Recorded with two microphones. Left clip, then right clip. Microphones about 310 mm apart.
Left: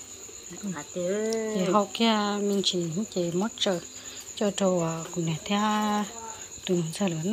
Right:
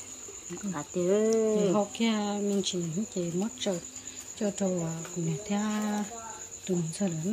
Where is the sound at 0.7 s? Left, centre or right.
Right.